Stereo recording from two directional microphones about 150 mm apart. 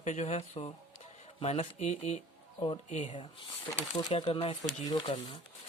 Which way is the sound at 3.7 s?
20° left (ahead or behind).